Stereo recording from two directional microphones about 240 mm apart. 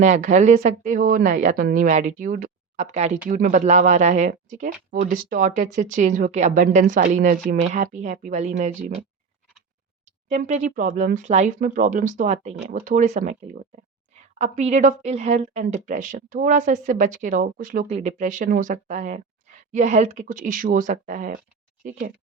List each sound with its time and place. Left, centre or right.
0.0 s a woman's voice: right
10.2 s a woman's voice: right